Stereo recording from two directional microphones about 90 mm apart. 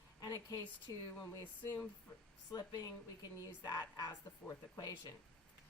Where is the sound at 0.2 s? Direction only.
40° left (ahead or behind).